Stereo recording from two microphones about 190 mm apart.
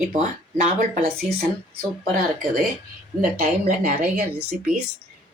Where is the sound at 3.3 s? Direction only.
45° right (ahead or behind).